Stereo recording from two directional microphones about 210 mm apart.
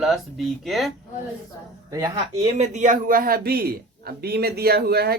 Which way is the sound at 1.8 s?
15° right (ahead or behind).